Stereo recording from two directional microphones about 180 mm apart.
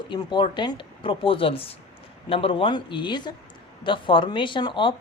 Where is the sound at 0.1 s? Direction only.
25° left (ahead or behind).